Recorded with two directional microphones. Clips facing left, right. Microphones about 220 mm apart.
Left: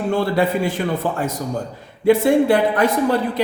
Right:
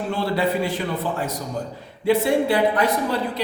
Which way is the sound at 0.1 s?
50° left (ahead or behind).